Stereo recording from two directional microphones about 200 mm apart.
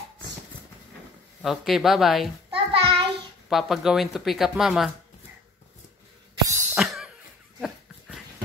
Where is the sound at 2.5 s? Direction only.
25° right (ahead or behind).